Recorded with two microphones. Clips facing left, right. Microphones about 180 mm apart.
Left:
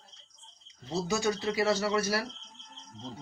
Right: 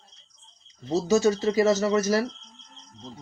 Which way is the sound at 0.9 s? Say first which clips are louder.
Right 8 dB; 40° right (ahead or behind).